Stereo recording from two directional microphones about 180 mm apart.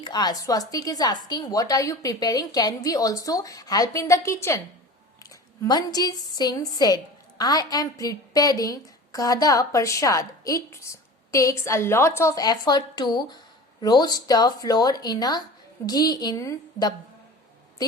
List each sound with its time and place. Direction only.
0.0 s a woman's voice: 25° left (ahead or behind)